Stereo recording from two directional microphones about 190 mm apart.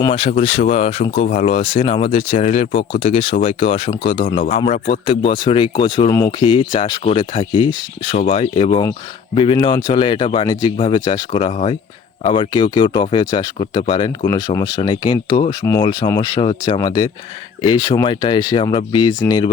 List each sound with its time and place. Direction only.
0.0 s speech: 30° left (ahead or behind)